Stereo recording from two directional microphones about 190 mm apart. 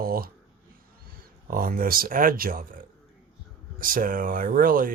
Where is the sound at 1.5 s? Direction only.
50° right (ahead or behind).